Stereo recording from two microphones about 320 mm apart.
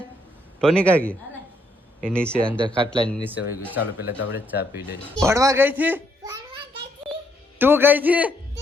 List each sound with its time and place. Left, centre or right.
0.6 s a man's voice: centre
2.0 s a man's voice: centre
2.6 s speech: centre
3.1 s a man's voice: centre
3.9 s speech: left
4.4 s speech: centre
7.6 s a man's voice: centre